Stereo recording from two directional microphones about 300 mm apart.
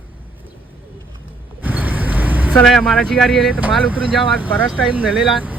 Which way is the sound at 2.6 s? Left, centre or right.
Centre.